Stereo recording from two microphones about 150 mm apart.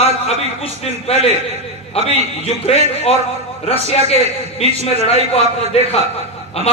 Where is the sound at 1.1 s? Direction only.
40° left (ahead or behind).